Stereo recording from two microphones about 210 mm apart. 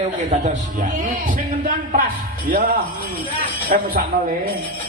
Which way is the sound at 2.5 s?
45° right (ahead or behind).